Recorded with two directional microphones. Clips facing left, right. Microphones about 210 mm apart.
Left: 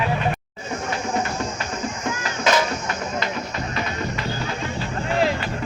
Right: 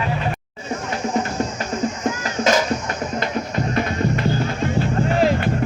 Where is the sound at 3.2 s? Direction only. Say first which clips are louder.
Right 4 dB; 50° right (ahead or behind).